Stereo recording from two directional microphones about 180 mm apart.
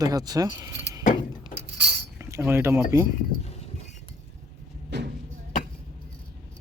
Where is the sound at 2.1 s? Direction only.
10° right (ahead or behind).